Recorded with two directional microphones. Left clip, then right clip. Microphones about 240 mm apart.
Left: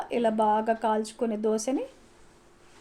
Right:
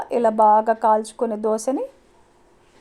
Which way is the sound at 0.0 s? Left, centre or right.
Right.